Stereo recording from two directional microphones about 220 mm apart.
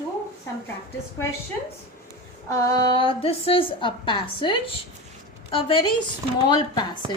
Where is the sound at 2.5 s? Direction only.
15° left (ahead or behind).